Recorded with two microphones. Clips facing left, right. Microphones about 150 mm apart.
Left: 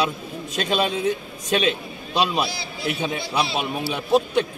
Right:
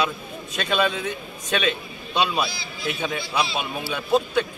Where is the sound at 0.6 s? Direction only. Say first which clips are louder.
Left 1 dB; 35° left (ahead or behind).